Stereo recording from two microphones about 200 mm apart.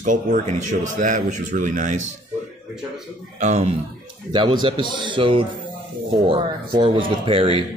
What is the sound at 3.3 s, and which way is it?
Speech, 35° right (ahead or behind).